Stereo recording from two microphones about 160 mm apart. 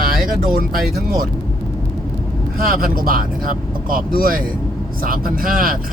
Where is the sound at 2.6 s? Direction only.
60° right (ahead or behind).